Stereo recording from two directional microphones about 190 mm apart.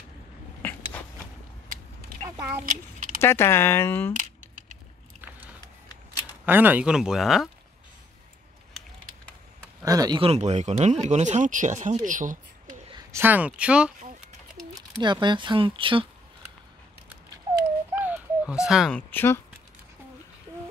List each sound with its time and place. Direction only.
0.6 s a sound: 10° left (ahead or behind)
2.2 s speech: 15° right (ahead or behind)
2.6 s a child's voice: 45° right (ahead or behind)
3.2 s speech: 15° left (ahead or behind)
6.4 s speech: 10° right (ahead or behind)
9.8 s speech: 20° right (ahead or behind); by 12.0 s 40° right (ahead or behind)
12.1 s a sound: 45° right (ahead or behind)
12.9 s speech: 15° right (ahead or behind)
14.7 s speech: 20° right (ahead or behind)
17.9 s a sound: 10° right (ahead or behind)
18.9 s speech: 10° left (ahead or behind)